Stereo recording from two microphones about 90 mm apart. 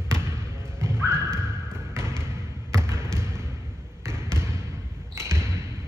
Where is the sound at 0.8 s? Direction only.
30° right (ahead or behind).